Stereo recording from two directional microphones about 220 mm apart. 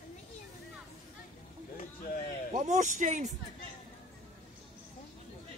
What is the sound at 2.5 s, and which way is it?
Speech, 35° right (ahead or behind).